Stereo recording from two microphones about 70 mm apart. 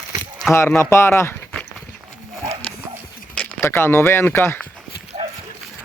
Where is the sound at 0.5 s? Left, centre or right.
Left.